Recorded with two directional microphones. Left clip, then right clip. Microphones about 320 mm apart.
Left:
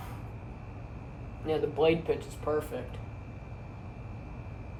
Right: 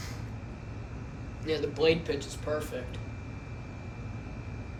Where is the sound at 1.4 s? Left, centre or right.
Centre.